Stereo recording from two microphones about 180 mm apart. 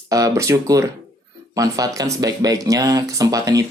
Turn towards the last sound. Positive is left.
turn(degrees=-20)  # may be behind; listen again after turning